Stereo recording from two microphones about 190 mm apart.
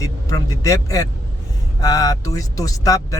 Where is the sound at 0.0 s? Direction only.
15° left (ahead or behind).